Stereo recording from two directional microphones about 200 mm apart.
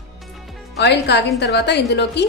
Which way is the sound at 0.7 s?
60° left (ahead or behind).